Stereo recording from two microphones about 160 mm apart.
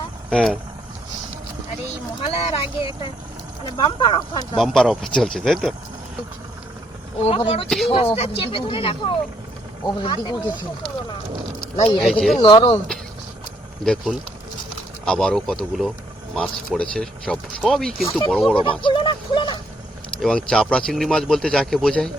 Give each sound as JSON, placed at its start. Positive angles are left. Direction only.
{"t": 0.3, "sound": "speech", "side_deg": 5}
{"t": 2.2, "sound": "speech", "side_deg": 35}
{"t": 4.5, "sound": "speech", "side_deg": 0}
{"t": 7.2, "sound": "speech", "side_deg": 40}
{"t": 11.6, "sound": "a sound", "side_deg": 25}
{"t": 12.0, "sound": "speech", "side_deg": 0}
{"t": 12.4, "sound": "speech", "side_deg": 30}
{"t": 13.8, "sound": "speech", "side_deg": 5}
{"t": 18.8, "sound": "speech", "side_deg": 30}
{"t": 20.2, "sound": "speech", "side_deg": 5}